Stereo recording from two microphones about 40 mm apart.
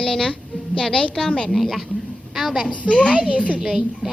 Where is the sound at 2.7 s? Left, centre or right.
Left.